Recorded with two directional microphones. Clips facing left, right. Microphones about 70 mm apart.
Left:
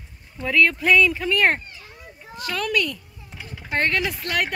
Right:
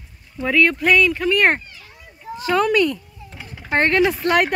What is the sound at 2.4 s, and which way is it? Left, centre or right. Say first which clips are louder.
A child's voice: right 7 dB; right.